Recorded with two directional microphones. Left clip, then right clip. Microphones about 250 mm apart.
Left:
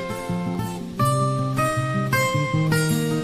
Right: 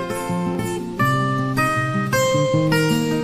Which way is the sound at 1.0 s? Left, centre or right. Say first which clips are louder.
Right 2 dB; left.